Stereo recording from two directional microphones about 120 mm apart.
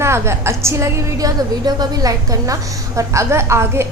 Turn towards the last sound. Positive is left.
turn(degrees=-20)  # may be behind; listen again after turning